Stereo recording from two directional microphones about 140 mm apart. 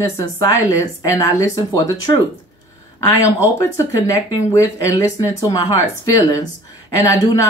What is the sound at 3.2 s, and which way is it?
Speech, 20° left (ahead or behind).